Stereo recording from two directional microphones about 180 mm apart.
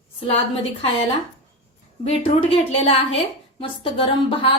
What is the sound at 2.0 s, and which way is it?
A woman's voice, 35° left (ahead or behind).